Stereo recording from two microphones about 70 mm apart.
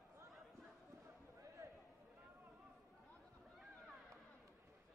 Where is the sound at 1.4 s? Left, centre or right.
Right.